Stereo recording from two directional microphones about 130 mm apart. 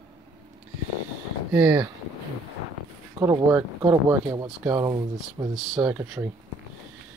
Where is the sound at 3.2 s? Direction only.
25° right (ahead or behind).